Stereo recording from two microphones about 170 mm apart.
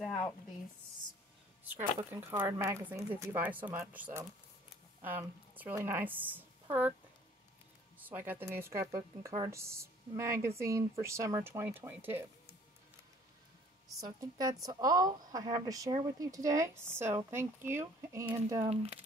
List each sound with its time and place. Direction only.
1.8 s a woman's voice: 15° right (ahead or behind)
8.1 s speech: 10° right (ahead or behind)
13.9 s a woman's voice: 20° right (ahead or behind)
18.7 s speech: 35° right (ahead or behind)